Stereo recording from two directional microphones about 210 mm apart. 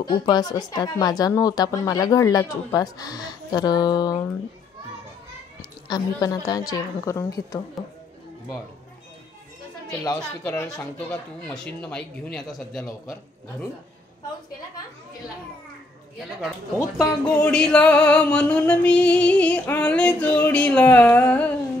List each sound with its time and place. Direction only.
0.0 s speech: 20° left (ahead or behind)
5.9 s speech: 20° left (ahead or behind)
10.4 s music: 5° left (ahead or behind)
16.3 s music: 5° right (ahead or behind)